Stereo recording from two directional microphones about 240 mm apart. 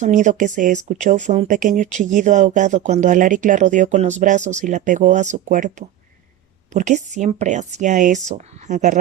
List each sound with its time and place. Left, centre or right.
0.0 s speech: right